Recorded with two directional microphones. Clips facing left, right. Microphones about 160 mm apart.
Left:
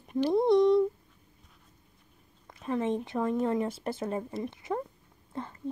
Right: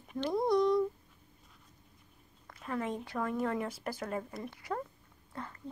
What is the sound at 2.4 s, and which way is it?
Speech, 20° left (ahead or behind).